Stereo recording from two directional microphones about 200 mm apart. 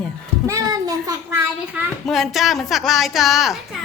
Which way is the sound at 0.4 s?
15° right (ahead or behind).